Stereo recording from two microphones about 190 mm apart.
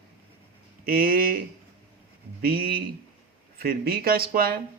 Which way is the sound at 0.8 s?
50° right (ahead or behind).